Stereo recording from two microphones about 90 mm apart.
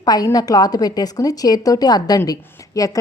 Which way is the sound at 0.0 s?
45° left (ahead or behind).